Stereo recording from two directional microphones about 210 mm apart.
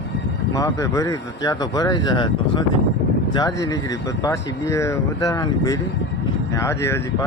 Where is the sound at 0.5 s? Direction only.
15° left (ahead or behind).